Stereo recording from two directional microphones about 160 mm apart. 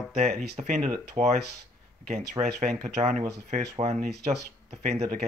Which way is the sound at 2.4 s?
25° right (ahead or behind).